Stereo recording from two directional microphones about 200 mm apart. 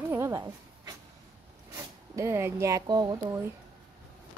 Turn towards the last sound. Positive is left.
turn(degrees=-20)  # may be behind; listen again after turning